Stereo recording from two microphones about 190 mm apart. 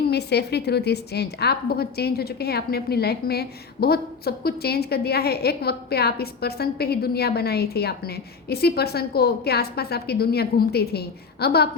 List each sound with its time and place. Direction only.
0.1 s a woman's voice: 60° left (ahead or behind)